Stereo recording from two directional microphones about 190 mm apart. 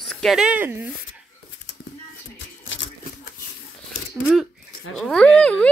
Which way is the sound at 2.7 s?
85° left.